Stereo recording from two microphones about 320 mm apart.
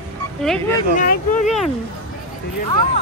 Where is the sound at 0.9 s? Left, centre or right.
Left.